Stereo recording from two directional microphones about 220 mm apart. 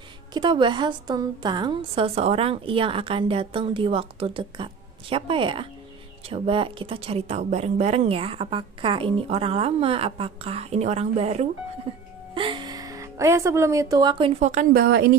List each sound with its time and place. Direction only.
0.3 s a woman's voice: 20° right (ahead or behind)
14.5 s a woman's voice: 40° right (ahead or behind)